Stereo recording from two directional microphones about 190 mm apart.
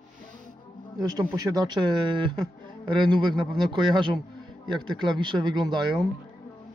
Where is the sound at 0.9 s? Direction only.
20° right (ahead or behind).